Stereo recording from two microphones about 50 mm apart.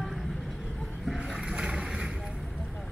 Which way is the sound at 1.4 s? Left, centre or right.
Centre.